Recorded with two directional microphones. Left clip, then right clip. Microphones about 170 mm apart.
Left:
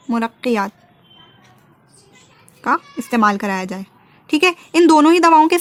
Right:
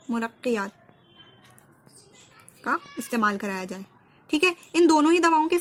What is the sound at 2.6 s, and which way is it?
Speech, 35° left (ahead or behind).